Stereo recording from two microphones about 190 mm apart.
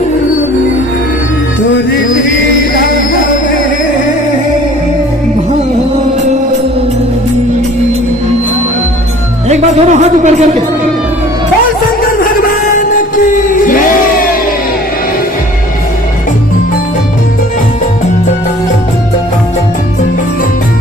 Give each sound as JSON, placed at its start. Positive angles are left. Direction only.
{"t": 9.5, "sound": "speech", "side_deg": -35}
{"t": 12.2, "sound": "music", "side_deg": 45}
{"t": 13.5, "sound": "chant", "side_deg": 45}